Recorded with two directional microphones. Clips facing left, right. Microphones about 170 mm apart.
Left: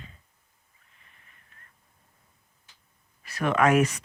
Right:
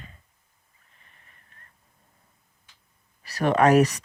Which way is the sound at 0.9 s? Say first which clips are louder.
Right 2 dB; 40° right (ahead or behind).